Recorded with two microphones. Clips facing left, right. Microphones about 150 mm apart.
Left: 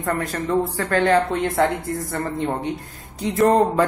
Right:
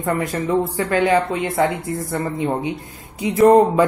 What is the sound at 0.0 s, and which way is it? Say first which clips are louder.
A woman's voice: right 3 dB; 10° right (ahead or behind).